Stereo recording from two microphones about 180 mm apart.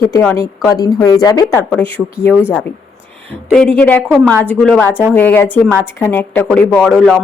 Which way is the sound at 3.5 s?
5° left (ahead or behind).